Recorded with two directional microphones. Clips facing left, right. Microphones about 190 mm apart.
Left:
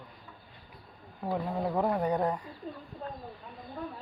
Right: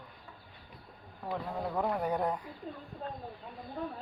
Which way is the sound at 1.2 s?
15° left (ahead or behind).